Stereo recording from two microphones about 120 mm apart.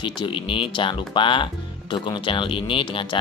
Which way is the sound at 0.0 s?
45° left (ahead or behind).